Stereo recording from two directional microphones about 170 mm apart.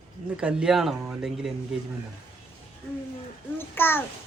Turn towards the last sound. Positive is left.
turn(degrees=15)  # may be behind; listen again after turning